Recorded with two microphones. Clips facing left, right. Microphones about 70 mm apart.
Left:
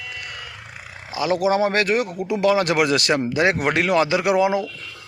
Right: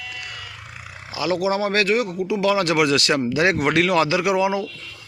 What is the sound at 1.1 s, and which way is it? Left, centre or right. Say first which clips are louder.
Speech: left 2 dB; left.